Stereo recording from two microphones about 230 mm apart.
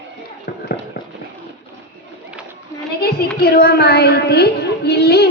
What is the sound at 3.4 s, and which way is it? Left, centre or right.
A woman's voice, left.